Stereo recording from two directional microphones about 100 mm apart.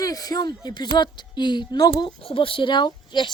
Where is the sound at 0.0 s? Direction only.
40° left (ahead or behind).